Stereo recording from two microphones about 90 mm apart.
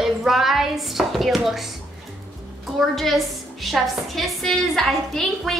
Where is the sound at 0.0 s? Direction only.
5° right (ahead or behind).